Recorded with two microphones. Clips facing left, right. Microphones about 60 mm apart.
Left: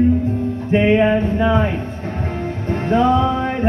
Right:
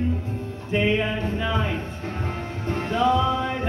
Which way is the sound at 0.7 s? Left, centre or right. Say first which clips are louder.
Left 8 dB; left.